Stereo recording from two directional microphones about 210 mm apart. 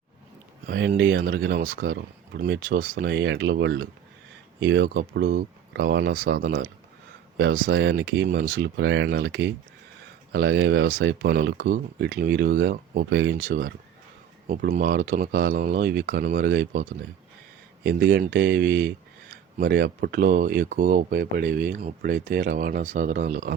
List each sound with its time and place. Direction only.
0.7 s speech: 55° right (ahead or behind)
17.8 s speech: 50° right (ahead or behind)